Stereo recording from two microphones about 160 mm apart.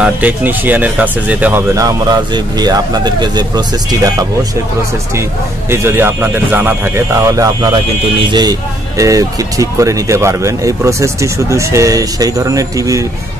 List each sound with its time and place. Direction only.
0.0 s speech: 10° right (ahead or behind)
5.7 s speech: 15° right (ahead or behind)